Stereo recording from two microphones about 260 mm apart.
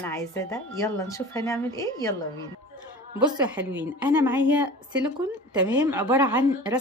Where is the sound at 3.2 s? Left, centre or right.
Centre.